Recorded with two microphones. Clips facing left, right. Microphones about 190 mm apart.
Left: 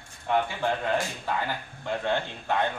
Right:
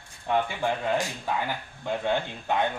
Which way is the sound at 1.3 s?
15° right (ahead or behind).